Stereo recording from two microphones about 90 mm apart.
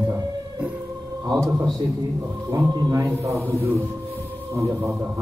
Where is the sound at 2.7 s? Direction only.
45° right (ahead or behind).